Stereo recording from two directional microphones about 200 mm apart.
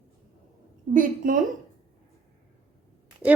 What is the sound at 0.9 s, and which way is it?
Speech, 40° right (ahead or behind).